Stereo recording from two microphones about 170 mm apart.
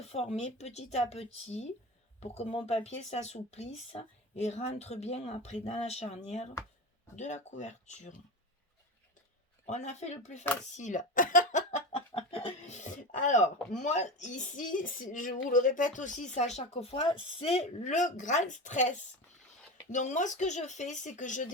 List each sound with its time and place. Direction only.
0.0 s a woman's voice: 35° left (ahead or behind)
9.6 s a woman's voice: 40° left (ahead or behind)
12.1 s a sound: 35° left (ahead or behind)
13.8 s a woman's voice: 45° left (ahead or behind)